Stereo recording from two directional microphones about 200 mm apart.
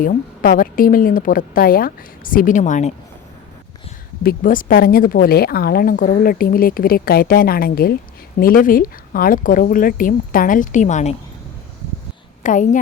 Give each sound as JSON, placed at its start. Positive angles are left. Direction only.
{"t": 0.0, "sound": "a woman's voice", "side_deg": 45}
{"t": 4.2, "sound": "a woman's voice", "side_deg": 45}
{"t": 12.4, "sound": "a woman's voice", "side_deg": 40}